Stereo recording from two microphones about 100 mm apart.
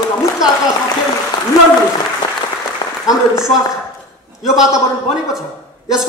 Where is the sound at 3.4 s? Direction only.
5° right (ahead or behind).